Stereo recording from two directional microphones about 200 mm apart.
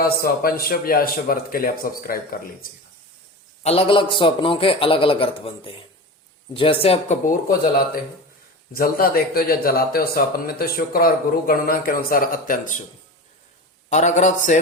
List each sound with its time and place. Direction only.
0.0 s speech: 50° left (ahead or behind)
3.6 s a man's voice: 30° left (ahead or behind)
8.7 s speech: 45° left (ahead or behind)
13.9 s a man's voice: 35° left (ahead or behind)